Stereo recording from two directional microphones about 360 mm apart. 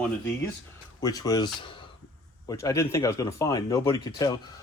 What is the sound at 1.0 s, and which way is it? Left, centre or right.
Speech, centre.